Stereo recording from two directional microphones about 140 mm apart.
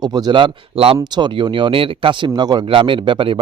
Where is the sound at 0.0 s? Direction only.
30° right (ahead or behind).